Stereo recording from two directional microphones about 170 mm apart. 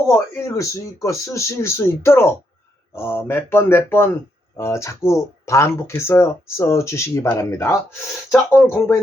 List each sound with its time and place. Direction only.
0.3 s speech: 20° left (ahead or behind)